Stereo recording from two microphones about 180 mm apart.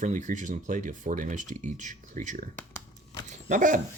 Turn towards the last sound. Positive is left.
turn(degrees=-45)  # may be behind; listen again after turning